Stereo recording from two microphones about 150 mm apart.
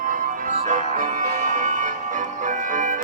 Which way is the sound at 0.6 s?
55° right (ahead or behind).